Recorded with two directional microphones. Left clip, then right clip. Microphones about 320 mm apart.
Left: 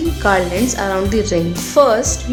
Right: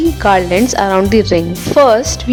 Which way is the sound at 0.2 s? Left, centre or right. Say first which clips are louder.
Right 3 dB; right.